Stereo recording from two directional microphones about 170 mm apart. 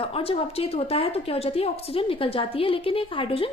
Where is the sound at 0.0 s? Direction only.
35° left (ahead or behind).